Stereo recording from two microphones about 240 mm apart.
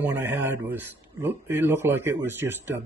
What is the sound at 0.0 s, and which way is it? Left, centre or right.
A man's voice, centre.